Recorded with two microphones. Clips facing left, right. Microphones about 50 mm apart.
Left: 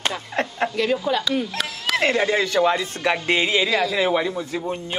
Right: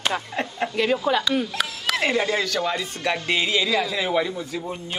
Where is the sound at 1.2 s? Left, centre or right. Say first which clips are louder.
Even; centre.